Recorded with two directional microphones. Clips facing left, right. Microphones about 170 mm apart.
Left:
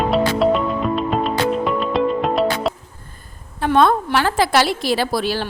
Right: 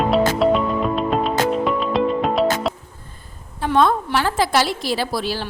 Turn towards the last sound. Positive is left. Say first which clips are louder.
# left 3 dB
turn(degrees=65)  # may be behind; listen again after turning